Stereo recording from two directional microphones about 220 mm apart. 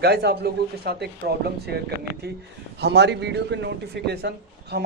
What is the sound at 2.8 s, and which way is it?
A man's voice, 50° right (ahead or behind).